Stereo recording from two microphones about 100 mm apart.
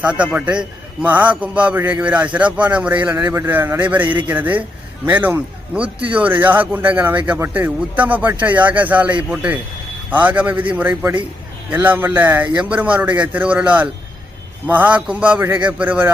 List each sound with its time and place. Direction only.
0.0 s a man's voice: 15° right (ahead or behind)